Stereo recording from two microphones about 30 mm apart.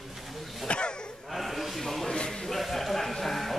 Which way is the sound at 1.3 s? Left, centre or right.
Centre.